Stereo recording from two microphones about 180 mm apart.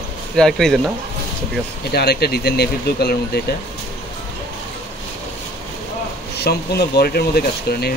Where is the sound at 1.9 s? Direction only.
60° left (ahead or behind).